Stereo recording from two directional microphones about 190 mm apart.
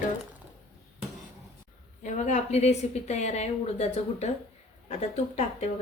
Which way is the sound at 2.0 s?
40° left (ahead or behind).